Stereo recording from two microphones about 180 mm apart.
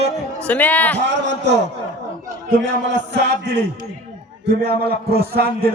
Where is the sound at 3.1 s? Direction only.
70° right (ahead or behind).